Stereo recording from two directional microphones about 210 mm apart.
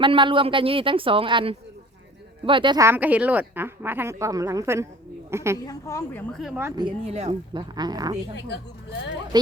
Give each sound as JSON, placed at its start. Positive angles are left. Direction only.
{"t": 0.0, "sound": "a woman's voice", "side_deg": -25}
{"t": 5.6, "sound": "a woman's voice", "side_deg": 15}
{"t": 6.3, "sound": "a woman's voice", "side_deg": 0}
{"t": 6.8, "sound": "a woman's voice", "side_deg": -30}
{"t": 9.3, "sound": "a woman's voice", "side_deg": -20}